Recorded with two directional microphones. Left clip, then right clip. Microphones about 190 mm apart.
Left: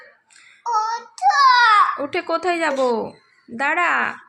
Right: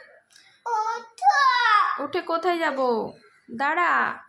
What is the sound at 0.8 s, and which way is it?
Child singing, 20° left (ahead or behind).